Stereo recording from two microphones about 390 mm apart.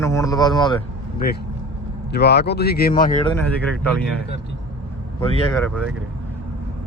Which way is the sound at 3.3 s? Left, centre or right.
Centre.